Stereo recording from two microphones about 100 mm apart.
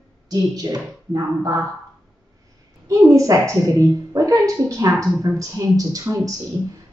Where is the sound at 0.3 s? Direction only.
40° right (ahead or behind).